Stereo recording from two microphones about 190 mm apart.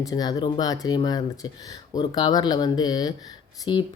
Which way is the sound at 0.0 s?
20° left (ahead or behind).